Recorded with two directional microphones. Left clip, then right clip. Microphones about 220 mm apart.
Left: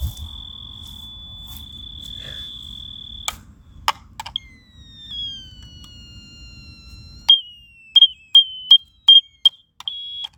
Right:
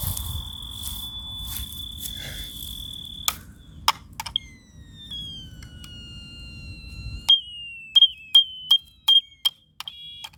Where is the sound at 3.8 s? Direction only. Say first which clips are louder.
Left 1 dB; 20° left (ahead or behind).